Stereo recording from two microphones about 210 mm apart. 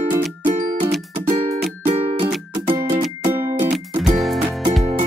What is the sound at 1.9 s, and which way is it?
Music, 30° right (ahead or behind).